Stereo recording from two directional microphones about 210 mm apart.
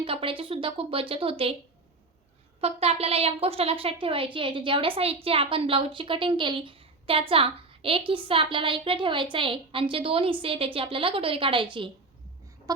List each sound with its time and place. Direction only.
0.0 s a woman's voice: 25° right (ahead or behind)
2.6 s a woman's voice: 30° right (ahead or behind)